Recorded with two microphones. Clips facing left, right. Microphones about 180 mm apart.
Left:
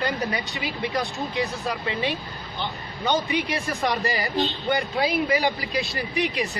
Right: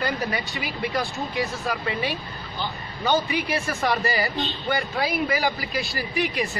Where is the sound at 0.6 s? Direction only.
25° left (ahead or behind).